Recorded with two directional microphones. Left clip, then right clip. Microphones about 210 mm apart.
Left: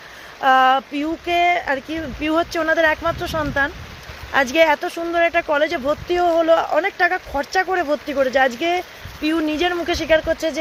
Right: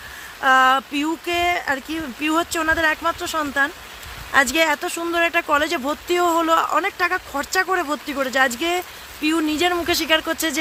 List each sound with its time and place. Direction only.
0.4 s speech: 10° right (ahead or behind)